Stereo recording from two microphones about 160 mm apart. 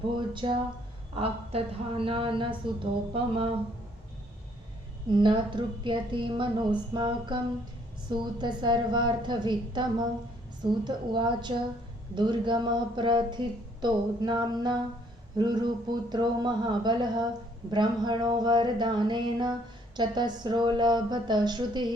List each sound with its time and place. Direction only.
0.4 s a woman's voice: 30° right (ahead or behind)
5.1 s a woman's voice: 30° right (ahead or behind)